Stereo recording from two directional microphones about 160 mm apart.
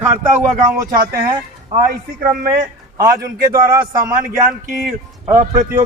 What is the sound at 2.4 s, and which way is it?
Speech, 60° right (ahead or behind).